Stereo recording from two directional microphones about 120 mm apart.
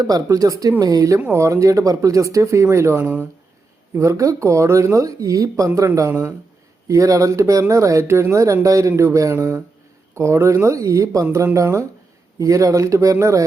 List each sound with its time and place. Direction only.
0.0 s speech: 30° right (ahead or behind)